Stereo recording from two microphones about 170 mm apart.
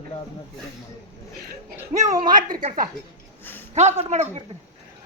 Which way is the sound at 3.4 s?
10° left (ahead or behind).